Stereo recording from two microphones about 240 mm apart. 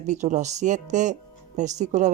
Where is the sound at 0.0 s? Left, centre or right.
Right.